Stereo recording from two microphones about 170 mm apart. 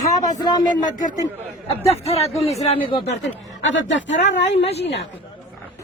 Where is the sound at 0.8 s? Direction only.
50° left (ahead or behind).